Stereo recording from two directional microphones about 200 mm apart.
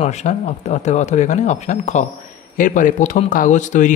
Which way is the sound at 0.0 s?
35° left (ahead or behind).